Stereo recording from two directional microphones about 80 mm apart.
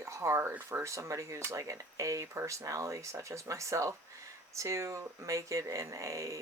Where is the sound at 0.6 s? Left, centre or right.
Right.